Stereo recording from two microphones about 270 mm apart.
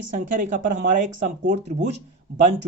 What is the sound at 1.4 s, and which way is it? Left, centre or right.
Speech, right.